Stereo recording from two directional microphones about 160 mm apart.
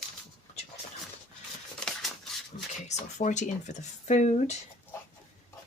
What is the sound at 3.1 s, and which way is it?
Speech, 50° left (ahead or behind).